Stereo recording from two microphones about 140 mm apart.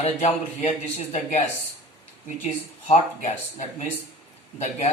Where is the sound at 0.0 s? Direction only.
50° left (ahead or behind).